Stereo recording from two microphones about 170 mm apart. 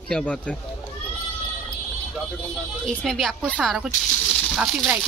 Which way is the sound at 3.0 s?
Centre (ahead or behind).